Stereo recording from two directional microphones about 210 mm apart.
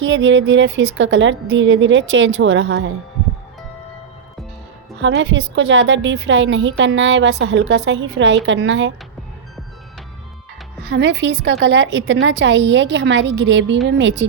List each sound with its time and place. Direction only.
0.0 s a woman's voice: 65° right (ahead or behind)
4.9 s a woman's voice: 60° right (ahead or behind)
10.8 s a woman's voice: 60° right (ahead or behind)